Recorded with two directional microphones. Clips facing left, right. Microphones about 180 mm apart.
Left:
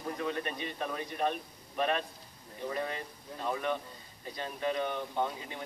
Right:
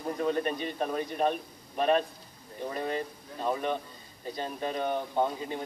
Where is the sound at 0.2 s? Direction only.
40° right (ahead or behind).